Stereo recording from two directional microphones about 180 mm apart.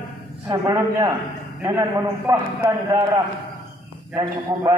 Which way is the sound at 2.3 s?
20° right (ahead or behind).